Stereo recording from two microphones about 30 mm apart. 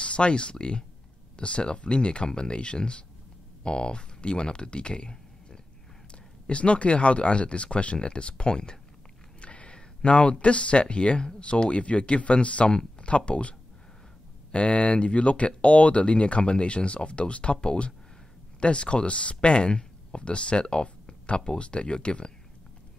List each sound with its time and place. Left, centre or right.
0.0 s speech: left
9.4 s a sound: left
10.4 s speech: left